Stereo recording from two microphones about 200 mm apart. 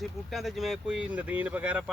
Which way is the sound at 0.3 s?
Centre (ahead or behind).